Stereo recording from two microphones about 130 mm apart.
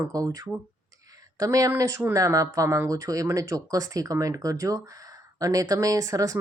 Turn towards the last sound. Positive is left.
turn(degrees=-25)  # may be behind; listen again after turning